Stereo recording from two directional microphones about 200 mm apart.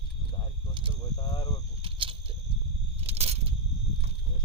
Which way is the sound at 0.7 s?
25° right (ahead or behind).